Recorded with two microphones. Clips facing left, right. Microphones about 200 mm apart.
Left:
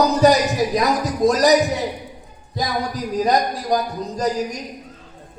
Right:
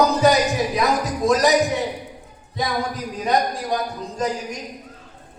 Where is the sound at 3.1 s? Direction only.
40° left (ahead or behind).